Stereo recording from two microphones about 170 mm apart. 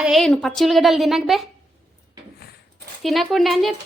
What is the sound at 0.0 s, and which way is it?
A woman's voice, centre (ahead or behind).